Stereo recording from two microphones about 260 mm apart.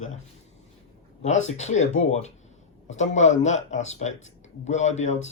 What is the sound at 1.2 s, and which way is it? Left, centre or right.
Speech, left.